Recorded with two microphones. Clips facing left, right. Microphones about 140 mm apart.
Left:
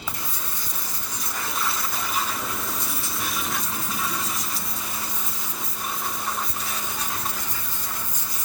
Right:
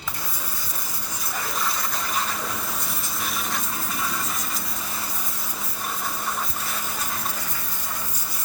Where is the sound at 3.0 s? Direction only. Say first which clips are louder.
Even; centre (ahead or behind).